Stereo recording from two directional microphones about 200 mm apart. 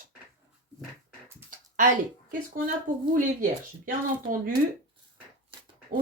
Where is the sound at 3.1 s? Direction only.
40° right (ahead or behind).